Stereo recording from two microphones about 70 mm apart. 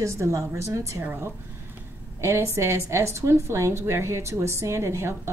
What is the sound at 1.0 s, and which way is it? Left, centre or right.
Speech, right.